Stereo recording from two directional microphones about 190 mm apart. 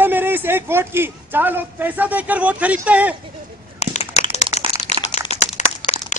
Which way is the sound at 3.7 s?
35° left (ahead or behind).